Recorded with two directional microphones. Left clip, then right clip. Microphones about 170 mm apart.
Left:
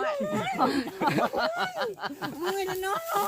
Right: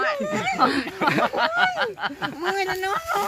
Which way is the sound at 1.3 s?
70° left (ahead or behind).